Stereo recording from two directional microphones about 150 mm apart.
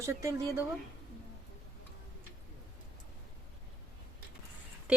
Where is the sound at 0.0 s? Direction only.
20° right (ahead or behind).